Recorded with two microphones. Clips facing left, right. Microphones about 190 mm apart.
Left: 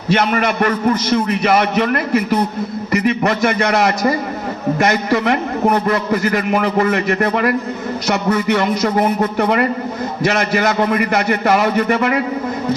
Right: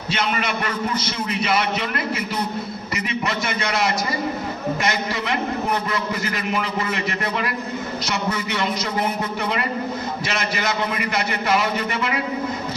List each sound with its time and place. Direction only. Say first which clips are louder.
0.1 s a man's voice: left 8 dB; 50° left (ahead or behind)